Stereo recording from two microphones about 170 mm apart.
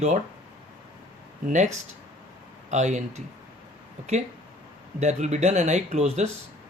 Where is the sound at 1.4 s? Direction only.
45° right (ahead or behind).